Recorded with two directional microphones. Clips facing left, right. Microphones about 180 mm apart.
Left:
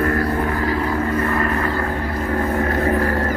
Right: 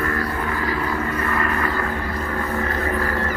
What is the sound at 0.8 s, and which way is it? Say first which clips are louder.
Vehicle: left 4 dB; 30° left (ahead or behind).